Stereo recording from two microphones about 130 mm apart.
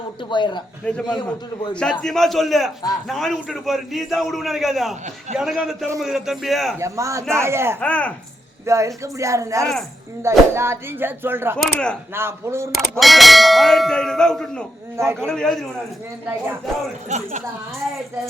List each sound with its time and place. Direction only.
0.3 s speech: 35° left (ahead or behind)
0.9 s a man's voice: 10° left (ahead or behind)
6.7 s speech: 25° right (ahead or behind)
7.8 s speech: 10° left (ahead or behind)
8.6 s speech: 25° right (ahead or behind)
11.5 s speech: 5° left (ahead or behind)
12.1 s speech: 20° right (ahead or behind)
12.7 s a man's voice: centre (ahead or behind)
14.9 s speech: 20° right (ahead or behind)
15.3 s a man's voice: 5° left (ahead or behind)
17.1 s speech: 65° right (ahead or behind)